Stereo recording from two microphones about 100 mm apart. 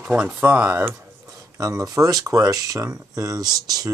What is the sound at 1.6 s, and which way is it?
Speech, 35° right (ahead or behind).